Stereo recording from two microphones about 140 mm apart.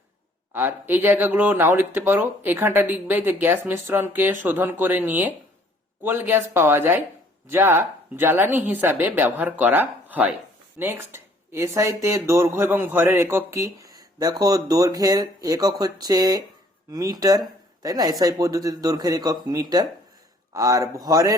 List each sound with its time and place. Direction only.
0.5 s speech: 15° right (ahead or behind)